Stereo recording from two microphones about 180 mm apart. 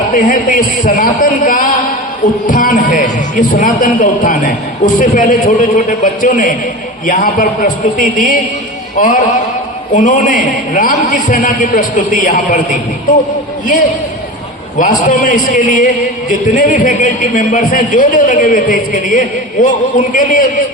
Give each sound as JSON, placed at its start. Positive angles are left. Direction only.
{"t": 0.1, "sound": "a man's voice", "side_deg": 50}
{"t": 14.8, "sound": "a man's voice", "side_deg": 45}